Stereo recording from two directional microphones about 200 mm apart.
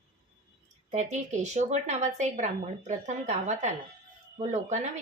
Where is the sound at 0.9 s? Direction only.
35° right (ahead or behind).